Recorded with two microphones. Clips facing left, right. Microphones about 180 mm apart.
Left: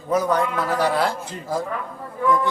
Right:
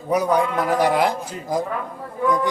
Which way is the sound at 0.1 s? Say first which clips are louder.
Right 1 dB; 15° right (ahead or behind).